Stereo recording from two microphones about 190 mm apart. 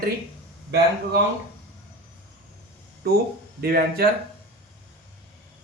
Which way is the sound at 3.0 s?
55° right (ahead or behind).